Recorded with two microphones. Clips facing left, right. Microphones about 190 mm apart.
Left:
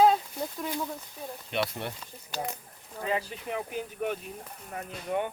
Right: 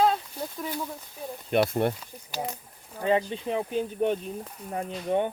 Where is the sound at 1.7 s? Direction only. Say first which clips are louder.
Right 11 dB; 50° right (ahead or behind).